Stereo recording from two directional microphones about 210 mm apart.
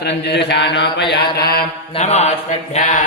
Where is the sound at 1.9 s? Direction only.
30° left (ahead or behind).